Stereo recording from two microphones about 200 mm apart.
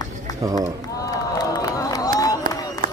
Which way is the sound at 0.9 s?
15° left (ahead or behind).